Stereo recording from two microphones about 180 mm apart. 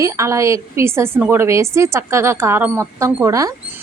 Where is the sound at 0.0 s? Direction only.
15° right (ahead or behind).